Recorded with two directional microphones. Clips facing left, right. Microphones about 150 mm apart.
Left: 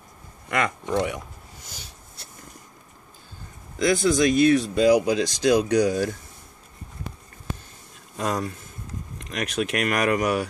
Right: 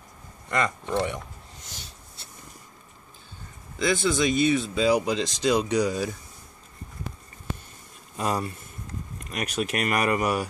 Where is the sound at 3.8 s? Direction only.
Centre (ahead or behind).